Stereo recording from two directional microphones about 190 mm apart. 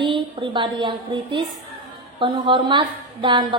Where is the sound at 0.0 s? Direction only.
25° right (ahead or behind).